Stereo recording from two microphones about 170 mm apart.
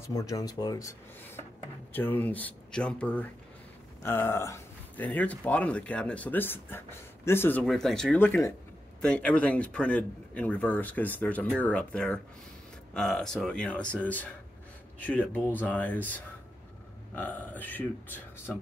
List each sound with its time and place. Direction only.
0.0 s speech: 20° left (ahead or behind)